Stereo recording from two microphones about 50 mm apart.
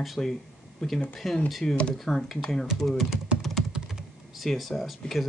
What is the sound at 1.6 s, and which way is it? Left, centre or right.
Speech, left.